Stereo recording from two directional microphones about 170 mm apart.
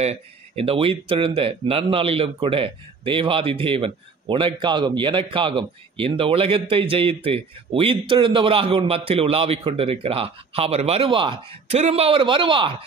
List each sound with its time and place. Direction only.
0.0 s speech: 40° right (ahead or behind)